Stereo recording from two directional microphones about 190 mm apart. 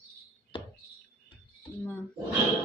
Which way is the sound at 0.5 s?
30° left (ahead or behind).